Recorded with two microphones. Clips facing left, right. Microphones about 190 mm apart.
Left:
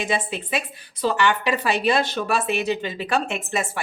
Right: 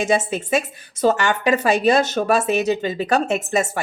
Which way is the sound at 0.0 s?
45° right (ahead or behind).